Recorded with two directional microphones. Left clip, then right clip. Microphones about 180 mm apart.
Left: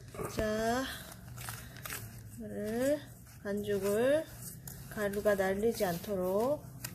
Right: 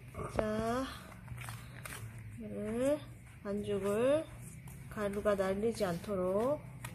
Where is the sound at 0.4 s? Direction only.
5° left (ahead or behind).